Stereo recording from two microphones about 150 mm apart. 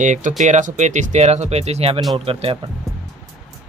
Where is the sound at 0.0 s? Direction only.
55° right (ahead or behind); by 2.6 s 40° right (ahead or behind).